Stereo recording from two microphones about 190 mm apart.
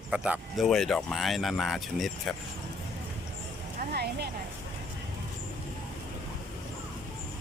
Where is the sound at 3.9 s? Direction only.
60° right (ahead or behind).